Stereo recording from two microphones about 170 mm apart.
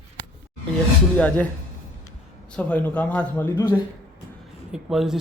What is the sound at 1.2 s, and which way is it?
Speech, 10° left (ahead or behind).